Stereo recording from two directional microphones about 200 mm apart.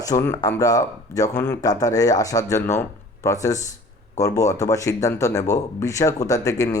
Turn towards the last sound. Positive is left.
turn(degrees=15)  # may be behind; listen again after turning